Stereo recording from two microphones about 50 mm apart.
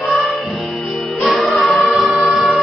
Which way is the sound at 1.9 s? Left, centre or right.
Centre.